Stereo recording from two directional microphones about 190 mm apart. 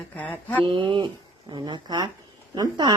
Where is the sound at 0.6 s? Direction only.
25° right (ahead or behind).